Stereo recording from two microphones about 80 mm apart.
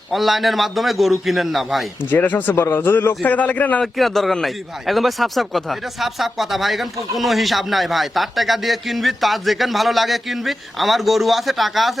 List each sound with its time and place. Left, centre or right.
0.1 s speech: centre
2.0 s speech: left
3.9 s speech: centre